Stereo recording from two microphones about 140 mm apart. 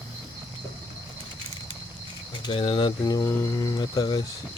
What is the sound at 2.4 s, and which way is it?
Speech, 40° left (ahead or behind).